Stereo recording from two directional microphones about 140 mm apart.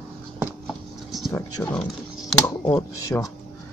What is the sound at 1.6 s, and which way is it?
Speech, 15° left (ahead or behind).